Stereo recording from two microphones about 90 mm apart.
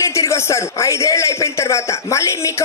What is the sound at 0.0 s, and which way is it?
A man's voice, 35° left (ahead or behind).